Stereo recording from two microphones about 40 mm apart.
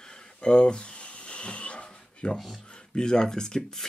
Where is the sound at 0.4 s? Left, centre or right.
Left.